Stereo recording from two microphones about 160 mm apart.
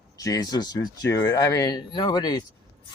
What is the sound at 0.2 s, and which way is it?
Speech, 25° left (ahead or behind).